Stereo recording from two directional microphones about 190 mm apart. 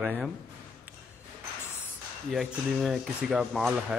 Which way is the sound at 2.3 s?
Centre (ahead or behind).